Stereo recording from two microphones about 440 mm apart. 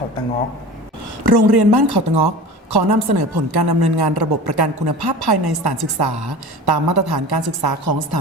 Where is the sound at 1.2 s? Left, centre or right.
Right.